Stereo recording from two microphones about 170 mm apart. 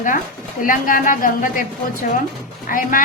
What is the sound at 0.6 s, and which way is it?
Speech, 55° left (ahead or behind).